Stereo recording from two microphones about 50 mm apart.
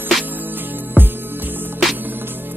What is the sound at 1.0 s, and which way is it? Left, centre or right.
Music, right.